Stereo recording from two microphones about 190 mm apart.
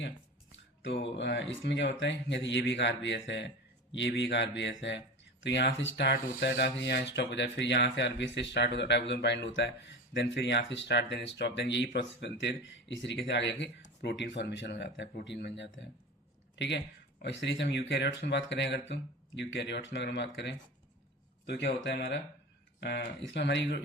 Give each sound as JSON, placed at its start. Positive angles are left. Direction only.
{"t": 0.5, "sound": "speech", "side_deg": 70}